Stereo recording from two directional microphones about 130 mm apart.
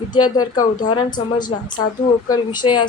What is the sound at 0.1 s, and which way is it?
Speech, 30° left (ahead or behind).